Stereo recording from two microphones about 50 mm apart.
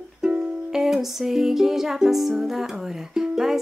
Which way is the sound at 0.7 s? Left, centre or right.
Centre.